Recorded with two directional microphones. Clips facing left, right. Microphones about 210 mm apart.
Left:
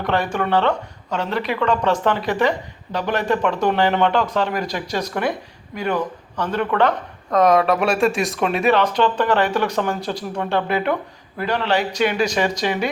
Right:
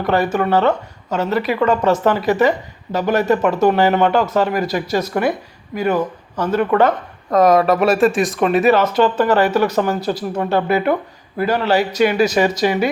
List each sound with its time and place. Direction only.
0.0 s speech: 5° right (ahead or behind)